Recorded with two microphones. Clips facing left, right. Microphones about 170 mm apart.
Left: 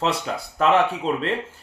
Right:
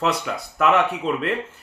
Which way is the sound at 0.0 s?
30° left (ahead or behind).